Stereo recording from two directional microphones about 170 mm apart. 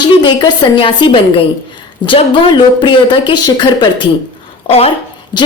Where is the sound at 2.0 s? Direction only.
30° left (ahead or behind).